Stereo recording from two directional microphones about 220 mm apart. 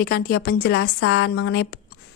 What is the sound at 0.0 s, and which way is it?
A woman's voice, 45° left (ahead or behind).